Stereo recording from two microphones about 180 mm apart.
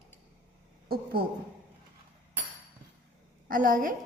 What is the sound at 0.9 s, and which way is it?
Speech, 60° right (ahead or behind).